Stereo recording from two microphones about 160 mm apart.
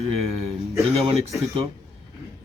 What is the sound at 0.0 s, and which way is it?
A man's voice, 40° right (ahead or behind).